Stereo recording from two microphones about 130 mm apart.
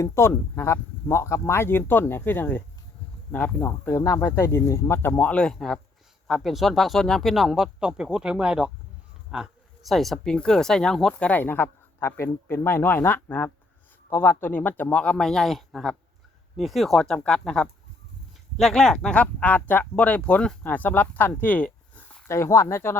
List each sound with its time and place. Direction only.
0.0 s speech: 20° left (ahead or behind)